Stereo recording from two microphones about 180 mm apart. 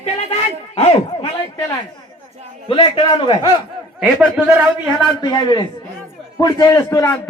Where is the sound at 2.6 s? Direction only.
30° left (ahead or behind).